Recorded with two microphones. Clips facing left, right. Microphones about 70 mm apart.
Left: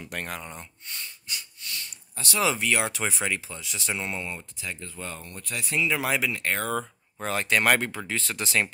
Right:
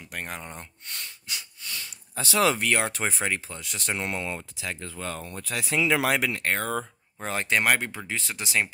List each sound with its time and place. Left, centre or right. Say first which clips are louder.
0.3 s speech: left 1 dB; right
0.8 s a sound: right 1 dB; right
1.9 s a sound: right 3 dB; right
2.5 s speech: right 1 dB; right
4.6 s speech: right 2 dB; right
7.2 s speech: left 1 dB; right
7.6 s speech: left 1 dB; centre